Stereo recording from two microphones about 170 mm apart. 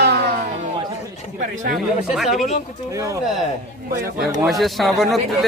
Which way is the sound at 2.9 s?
20° right (ahead or behind).